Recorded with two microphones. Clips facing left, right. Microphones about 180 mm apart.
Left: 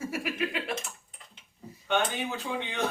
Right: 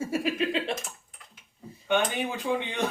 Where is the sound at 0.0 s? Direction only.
25° right (ahead or behind).